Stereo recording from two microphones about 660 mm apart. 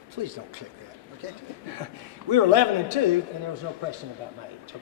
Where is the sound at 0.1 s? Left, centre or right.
Right.